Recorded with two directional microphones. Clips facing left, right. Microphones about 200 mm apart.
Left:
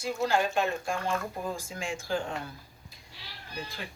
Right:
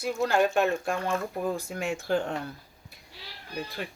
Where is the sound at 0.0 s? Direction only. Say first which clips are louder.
Right 3 dB; 60° right (ahead or behind).